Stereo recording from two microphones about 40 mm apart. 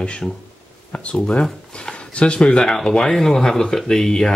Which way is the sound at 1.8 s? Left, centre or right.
Left.